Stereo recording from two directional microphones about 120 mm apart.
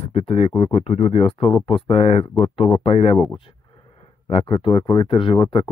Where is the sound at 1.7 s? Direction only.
55° left (ahead or behind).